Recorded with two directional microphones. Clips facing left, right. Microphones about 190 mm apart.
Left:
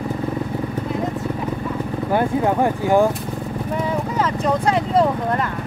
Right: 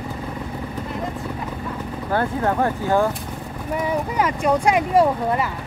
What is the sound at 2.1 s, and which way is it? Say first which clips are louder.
Speech: left 2 dB; 15° left (ahead or behind).